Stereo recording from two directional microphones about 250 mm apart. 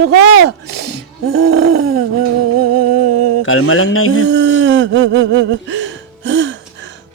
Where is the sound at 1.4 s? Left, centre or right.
Right.